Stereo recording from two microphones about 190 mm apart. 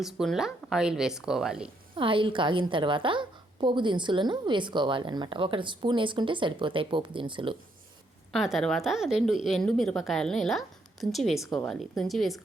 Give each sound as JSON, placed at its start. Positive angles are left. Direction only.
{"t": 0.0, "sound": "a woman's voice", "side_deg": 0}
{"t": 2.0, "sound": "a woman's voice", "side_deg": -25}
{"t": 8.3, "sound": "a woman's voice", "side_deg": 0}